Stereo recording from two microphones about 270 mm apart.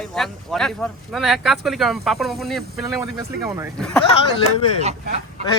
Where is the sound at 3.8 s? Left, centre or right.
Centre.